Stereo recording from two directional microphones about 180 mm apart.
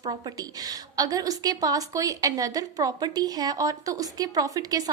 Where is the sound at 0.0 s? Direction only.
25° right (ahead or behind).